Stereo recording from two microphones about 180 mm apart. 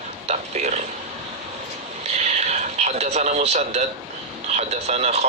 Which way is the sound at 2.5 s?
40° right (ahead or behind).